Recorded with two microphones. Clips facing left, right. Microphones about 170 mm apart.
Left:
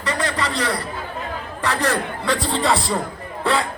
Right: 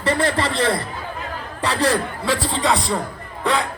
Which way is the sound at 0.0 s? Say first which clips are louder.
Right 4 dB; 30° right (ahead or behind).